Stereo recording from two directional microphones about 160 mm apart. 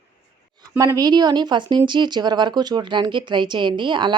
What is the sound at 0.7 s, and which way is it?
Speech, 20° right (ahead or behind).